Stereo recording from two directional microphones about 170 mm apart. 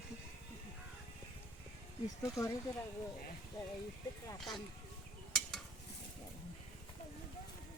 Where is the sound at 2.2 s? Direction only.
20° left (ahead or behind).